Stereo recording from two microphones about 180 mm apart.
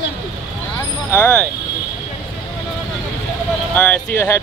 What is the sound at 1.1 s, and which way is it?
Speech, 10° left (ahead or behind).